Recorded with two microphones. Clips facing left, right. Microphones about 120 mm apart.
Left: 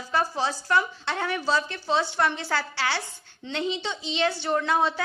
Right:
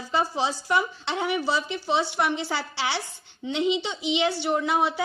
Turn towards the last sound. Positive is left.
turn(degrees=-15)  # may be behind; listen again after turning